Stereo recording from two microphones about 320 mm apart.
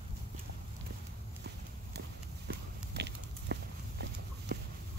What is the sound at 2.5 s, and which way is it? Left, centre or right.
Horse, right.